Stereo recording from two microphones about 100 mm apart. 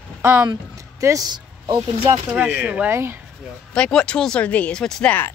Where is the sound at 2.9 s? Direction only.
25° right (ahead or behind).